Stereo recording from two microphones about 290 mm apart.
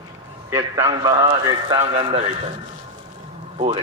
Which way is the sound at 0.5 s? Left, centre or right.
Centre.